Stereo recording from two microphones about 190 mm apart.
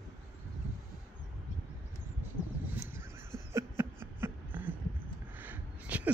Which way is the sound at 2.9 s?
15° right (ahead or behind).